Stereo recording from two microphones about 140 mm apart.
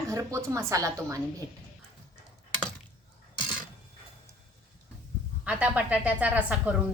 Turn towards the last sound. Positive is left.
turn(degrees=-10)  # may be behind; listen again after turning